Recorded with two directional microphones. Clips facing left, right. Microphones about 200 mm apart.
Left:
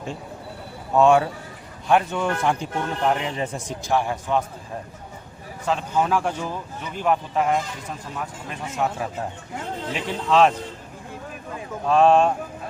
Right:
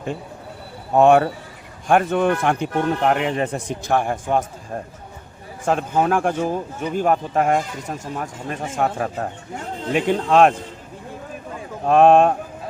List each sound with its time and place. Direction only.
0.9 s speech: 60° right (ahead or behind)
5.6 s speech: 50° right (ahead or behind)
11.9 s speech: 55° right (ahead or behind)